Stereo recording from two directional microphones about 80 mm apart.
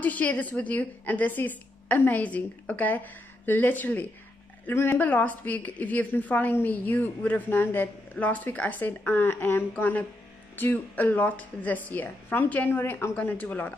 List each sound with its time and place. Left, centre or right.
0.0 s a woman's voice: centre